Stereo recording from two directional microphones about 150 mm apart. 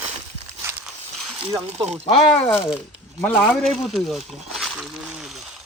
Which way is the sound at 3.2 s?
15° left (ahead or behind).